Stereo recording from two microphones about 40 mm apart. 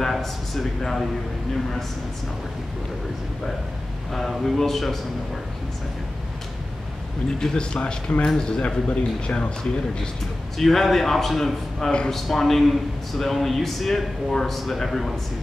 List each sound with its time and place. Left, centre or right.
0.0 s a man's voice: centre
4.1 s a man's voice: centre
7.3 s speech: left
10.6 s a man's voice: centre